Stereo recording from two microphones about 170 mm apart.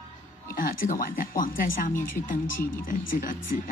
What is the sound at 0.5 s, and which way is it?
Speech, 55° left (ahead or behind).